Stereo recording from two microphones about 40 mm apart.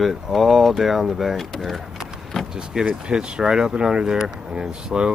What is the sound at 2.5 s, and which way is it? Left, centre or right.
Speech, centre.